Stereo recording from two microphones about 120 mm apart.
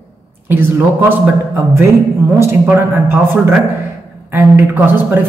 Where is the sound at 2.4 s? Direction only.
20° right (ahead or behind).